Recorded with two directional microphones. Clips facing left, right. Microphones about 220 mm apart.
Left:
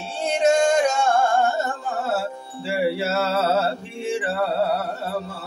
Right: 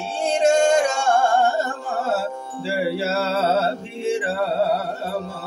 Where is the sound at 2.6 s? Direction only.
30° right (ahead or behind).